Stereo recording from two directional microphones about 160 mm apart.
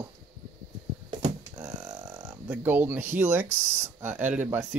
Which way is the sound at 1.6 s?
25° right (ahead or behind).